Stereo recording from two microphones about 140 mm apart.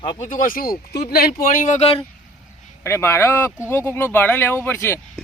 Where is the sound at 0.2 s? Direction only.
75° left (ahead or behind); by 0.8 s 90° left.